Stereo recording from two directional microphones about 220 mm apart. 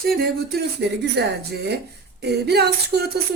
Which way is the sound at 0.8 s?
50° right (ahead or behind).